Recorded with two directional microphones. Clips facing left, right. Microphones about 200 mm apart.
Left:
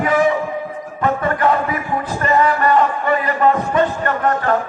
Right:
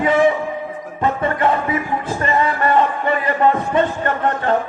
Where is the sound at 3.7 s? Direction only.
25° right (ahead or behind).